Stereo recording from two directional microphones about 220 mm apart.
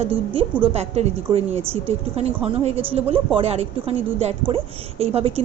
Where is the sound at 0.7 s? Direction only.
30° right (ahead or behind).